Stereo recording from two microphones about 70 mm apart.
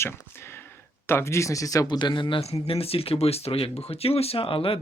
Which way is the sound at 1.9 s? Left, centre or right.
Left.